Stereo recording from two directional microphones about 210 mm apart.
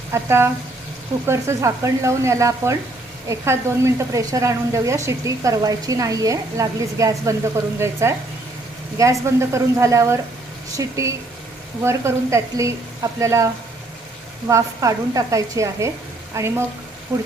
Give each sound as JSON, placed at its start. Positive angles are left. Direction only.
{"t": 0.1, "sound": "speech", "side_deg": -10}